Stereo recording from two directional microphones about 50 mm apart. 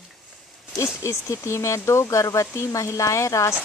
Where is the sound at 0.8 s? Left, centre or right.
Left.